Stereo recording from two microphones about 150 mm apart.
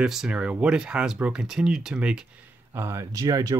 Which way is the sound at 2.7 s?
20° right (ahead or behind).